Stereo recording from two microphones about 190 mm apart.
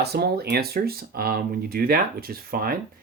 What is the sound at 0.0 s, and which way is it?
Speech, 55° right (ahead or behind).